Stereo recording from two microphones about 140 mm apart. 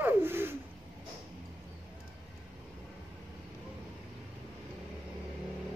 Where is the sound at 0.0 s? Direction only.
15° right (ahead or behind).